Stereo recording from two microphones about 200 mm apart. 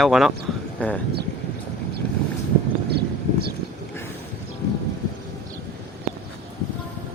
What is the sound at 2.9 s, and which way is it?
Vehicle, 55° right (ahead or behind).